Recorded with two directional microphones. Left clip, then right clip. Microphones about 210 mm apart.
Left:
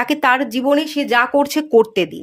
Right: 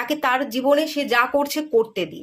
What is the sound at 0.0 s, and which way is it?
Speech, 30° left (ahead or behind).